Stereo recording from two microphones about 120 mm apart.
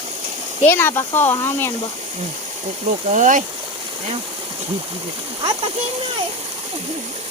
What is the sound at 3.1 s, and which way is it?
Speech, 90° right.